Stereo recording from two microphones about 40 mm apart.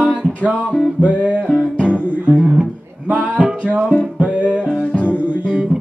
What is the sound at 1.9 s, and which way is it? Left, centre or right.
Guitar, right.